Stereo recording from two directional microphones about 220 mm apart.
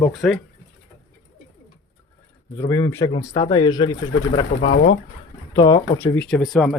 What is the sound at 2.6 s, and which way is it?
Speech, 15° left (ahead or behind).